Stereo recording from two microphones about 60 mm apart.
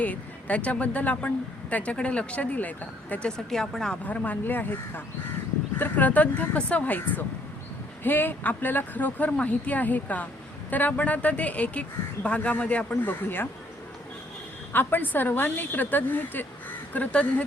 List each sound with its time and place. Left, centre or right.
0.0 s speech: left
3.2 s speech: centre
4.0 s a woman's voice: left
12.9 s a woman's voice: left
14.7 s a woman's voice: left